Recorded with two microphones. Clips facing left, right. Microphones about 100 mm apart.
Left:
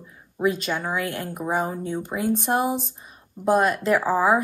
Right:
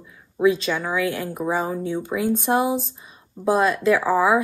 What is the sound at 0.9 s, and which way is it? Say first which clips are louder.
Speech: right 4 dB; 50° left (ahead or behind).